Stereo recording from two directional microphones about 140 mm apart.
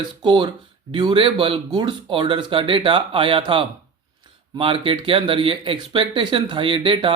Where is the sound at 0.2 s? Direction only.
35° right (ahead or behind).